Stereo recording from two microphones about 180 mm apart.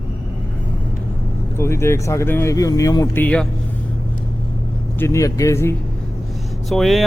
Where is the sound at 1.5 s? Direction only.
15° left (ahead or behind).